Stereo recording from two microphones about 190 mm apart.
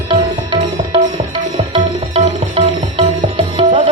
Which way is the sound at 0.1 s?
25° right (ahead or behind).